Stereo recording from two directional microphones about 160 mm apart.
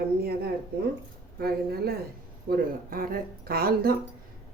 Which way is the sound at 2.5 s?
60° right (ahead or behind).